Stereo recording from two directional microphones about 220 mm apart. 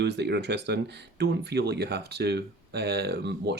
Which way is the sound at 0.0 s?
50° right (ahead or behind).